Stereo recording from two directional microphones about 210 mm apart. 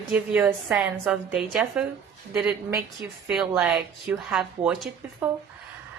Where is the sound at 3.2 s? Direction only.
5° right (ahead or behind).